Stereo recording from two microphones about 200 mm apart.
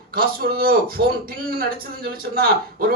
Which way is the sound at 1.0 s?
60° right (ahead or behind).